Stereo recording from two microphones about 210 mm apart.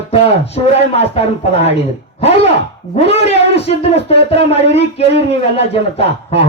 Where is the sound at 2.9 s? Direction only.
30° left (ahead or behind).